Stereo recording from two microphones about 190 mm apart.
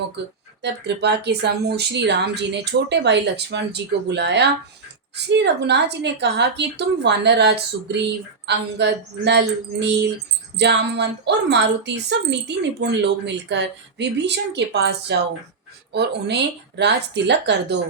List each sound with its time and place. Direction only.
0.2 s a woman's voice: 65° right (ahead or behind)